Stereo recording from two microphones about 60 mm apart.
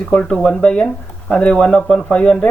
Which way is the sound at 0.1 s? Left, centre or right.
Centre.